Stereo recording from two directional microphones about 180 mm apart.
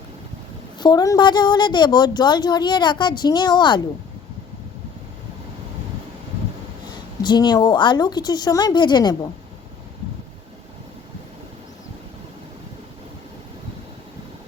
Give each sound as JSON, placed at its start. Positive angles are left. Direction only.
{"t": 0.8, "sound": "a woman's voice", "side_deg": 25}
{"t": 7.2, "sound": "a woman's voice", "side_deg": 25}